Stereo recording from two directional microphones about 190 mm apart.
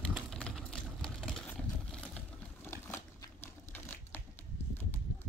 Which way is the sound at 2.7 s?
15° left (ahead or behind).